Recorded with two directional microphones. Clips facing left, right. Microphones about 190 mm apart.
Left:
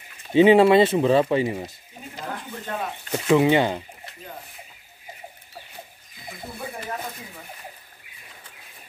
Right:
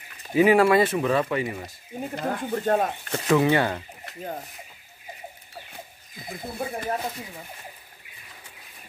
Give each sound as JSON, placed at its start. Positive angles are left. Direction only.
{"t": 0.3, "sound": "speech", "side_deg": 25}
{"t": 2.1, "sound": "speech", "side_deg": -50}
{"t": 3.1, "sound": "speech", "side_deg": 15}